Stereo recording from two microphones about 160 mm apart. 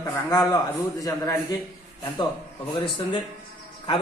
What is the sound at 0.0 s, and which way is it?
A man's voice, 20° left (ahead or behind).